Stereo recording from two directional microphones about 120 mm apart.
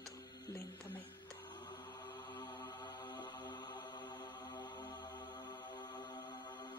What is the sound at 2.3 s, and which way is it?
Mantra, 40° left (ahead or behind).